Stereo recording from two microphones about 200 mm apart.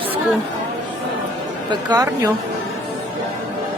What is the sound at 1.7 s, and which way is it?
Speech, 20° right (ahead or behind).